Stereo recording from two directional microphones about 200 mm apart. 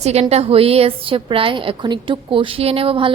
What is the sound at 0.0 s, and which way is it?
A woman's voice, 30° right (ahead or behind).